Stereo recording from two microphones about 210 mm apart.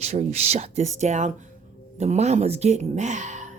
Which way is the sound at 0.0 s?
30° right (ahead or behind).